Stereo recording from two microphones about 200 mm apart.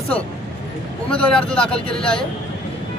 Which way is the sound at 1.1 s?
5° left (ahead or behind).